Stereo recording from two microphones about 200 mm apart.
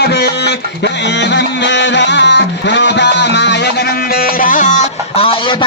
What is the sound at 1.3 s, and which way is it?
Music, 60° left (ahead or behind).